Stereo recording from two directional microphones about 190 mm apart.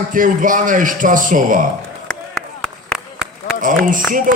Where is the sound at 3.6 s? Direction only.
45° right (ahead or behind).